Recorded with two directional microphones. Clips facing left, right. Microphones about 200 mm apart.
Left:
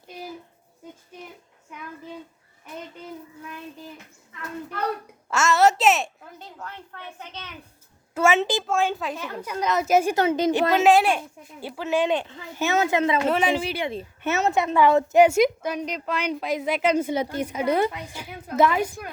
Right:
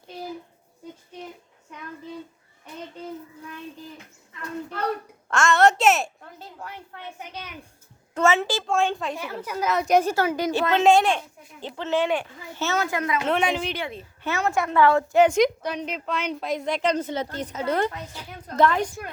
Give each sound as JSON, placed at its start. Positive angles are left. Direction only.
{"t": 5.3, "sound": "a sound", "side_deg": 5}
{"t": 6.6, "sound": "a sound", "side_deg": -10}
{"t": 8.1, "sound": "a sound", "side_deg": 10}
{"t": 8.4, "sound": "a woman's voice", "side_deg": 20}
{"t": 8.6, "sound": "a woman's voice", "side_deg": 5}
{"t": 9.1, "sound": "a woman's voice", "side_deg": -10}
{"t": 10.8, "sound": "a woman's voice", "side_deg": 5}
{"t": 13.2, "sound": "a woman's voice", "side_deg": 5}
{"t": 13.8, "sound": "a woman's voice", "side_deg": 20}